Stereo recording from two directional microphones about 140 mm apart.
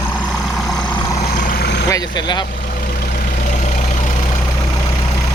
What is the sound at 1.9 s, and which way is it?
Speech, 30° left (ahead or behind).